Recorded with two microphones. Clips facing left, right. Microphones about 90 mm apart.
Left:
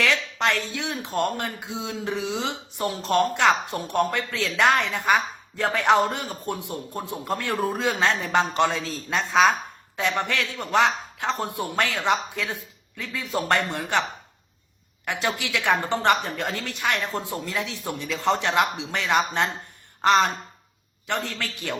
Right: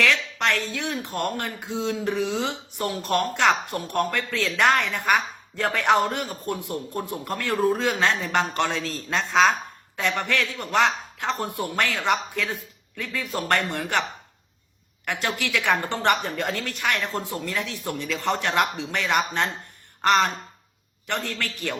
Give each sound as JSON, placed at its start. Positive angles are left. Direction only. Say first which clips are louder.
{"t": 0.0, "sound": "speech", "louder": "even", "side_deg": 15}
{"t": 15.0, "sound": "speech", "louder": "even", "side_deg": 15}